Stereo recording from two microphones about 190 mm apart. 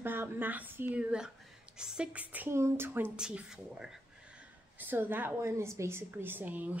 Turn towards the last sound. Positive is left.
turn(degrees=-10)  # may be behind; listen again after turning